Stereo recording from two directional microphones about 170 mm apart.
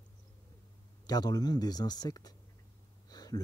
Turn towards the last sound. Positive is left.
turn(degrees=25)  # may be behind; listen again after turning